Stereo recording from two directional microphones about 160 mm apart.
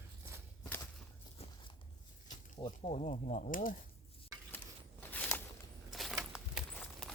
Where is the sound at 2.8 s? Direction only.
45° left (ahead or behind); by 3.7 s 60° left (ahead or behind).